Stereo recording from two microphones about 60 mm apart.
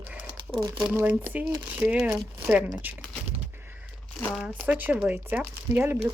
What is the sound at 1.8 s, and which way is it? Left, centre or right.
Speech, centre.